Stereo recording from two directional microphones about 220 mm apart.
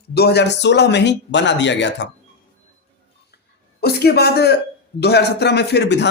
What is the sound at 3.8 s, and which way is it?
Speech, 45° left (ahead or behind).